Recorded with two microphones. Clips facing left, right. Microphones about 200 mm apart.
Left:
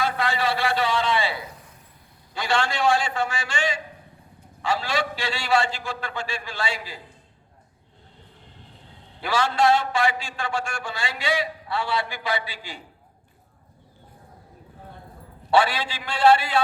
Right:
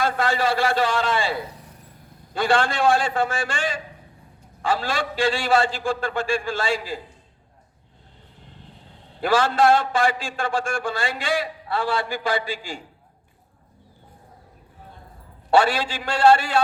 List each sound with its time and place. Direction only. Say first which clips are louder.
0.0 s a man's voice: right 3 dB; 50° right (ahead or behind)
9.2 s a man's voice: right 3 dB; 50° right (ahead or behind)
15.4 s a man's voice: right 2 dB; 45° right (ahead or behind)